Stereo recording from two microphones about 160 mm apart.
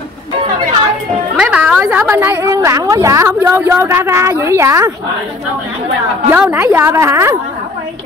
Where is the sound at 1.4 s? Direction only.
5° right (ahead or behind).